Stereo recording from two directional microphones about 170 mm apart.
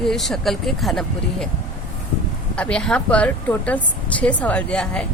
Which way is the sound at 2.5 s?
5° left (ahead or behind).